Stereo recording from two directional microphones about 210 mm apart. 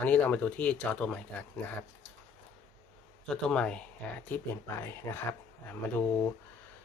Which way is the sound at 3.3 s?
5° left (ahead or behind).